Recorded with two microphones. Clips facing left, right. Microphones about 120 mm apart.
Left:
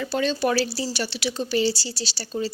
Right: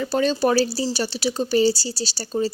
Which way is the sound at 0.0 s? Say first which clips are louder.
Right 3 dB; 40° right (ahead or behind).